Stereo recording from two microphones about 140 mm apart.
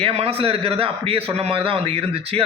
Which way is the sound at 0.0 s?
45° right (ahead or behind).